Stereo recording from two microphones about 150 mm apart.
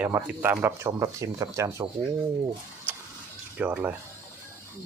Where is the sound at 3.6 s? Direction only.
10° right (ahead or behind).